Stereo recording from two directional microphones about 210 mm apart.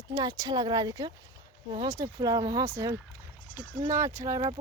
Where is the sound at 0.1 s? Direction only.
15° right (ahead or behind).